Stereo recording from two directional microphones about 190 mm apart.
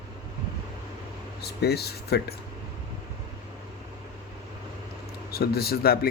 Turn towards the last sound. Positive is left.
turn(degrees=55)  # may be behind; listen again after turning